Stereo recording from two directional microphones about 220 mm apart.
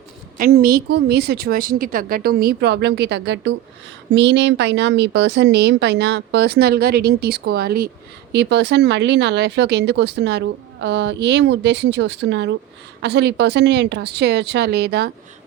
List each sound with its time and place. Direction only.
0.3 s speech: 40° right (ahead or behind)